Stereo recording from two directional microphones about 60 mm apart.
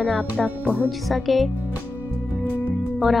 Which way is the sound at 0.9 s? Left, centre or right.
Centre.